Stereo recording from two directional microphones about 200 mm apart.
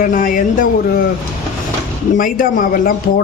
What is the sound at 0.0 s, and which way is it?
Speech, 45° left (ahead or behind).